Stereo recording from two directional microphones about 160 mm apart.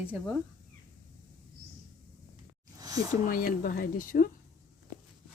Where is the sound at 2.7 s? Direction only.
20° right (ahead or behind).